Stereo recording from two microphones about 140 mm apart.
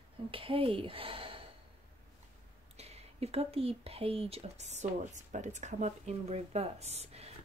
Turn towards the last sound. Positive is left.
turn(degrees=-50)  # may be behind; listen again after turning